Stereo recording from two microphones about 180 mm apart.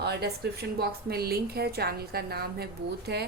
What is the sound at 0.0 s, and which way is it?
A woman's voice, 65° right (ahead or behind).